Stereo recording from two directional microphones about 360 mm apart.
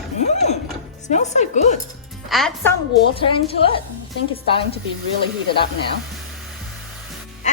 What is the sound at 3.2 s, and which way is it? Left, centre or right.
Speech, centre.